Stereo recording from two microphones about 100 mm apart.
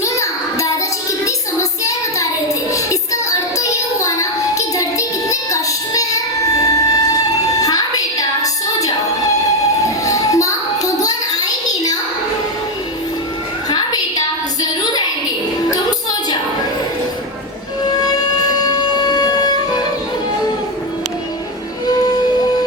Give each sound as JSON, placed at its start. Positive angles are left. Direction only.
{"t": 0.0, "sound": "child singing", "side_deg": 30}
{"t": 13.7, "sound": "music", "side_deg": 45}
{"t": 15.7, "sound": "music", "side_deg": 40}
{"t": 17.8, "sound": "music", "side_deg": 40}